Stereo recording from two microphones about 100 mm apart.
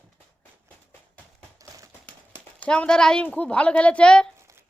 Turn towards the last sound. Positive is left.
turn(degrees=10)  # may be behind; listen again after turning